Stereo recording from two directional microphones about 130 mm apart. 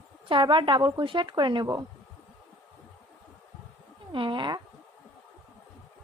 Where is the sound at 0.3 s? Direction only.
40° right (ahead or behind).